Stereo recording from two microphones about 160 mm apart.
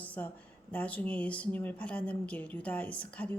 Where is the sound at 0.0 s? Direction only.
10° left (ahead or behind).